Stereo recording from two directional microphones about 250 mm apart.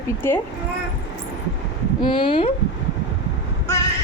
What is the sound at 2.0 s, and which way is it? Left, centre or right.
Speech, centre.